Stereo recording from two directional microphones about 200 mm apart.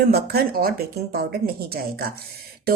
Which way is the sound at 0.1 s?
50° right (ahead or behind).